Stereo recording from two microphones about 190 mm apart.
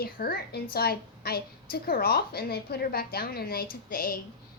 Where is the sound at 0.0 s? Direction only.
50° left (ahead or behind).